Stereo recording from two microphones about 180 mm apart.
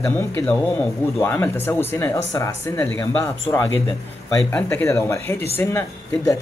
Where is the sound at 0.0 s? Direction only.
10° left (ahead or behind).